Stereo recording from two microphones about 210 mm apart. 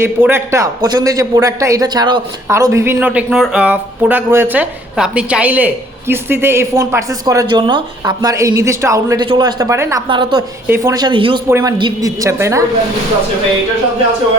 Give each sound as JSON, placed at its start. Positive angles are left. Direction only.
{"t": 0.0, "sound": "a man's voice", "side_deg": -10}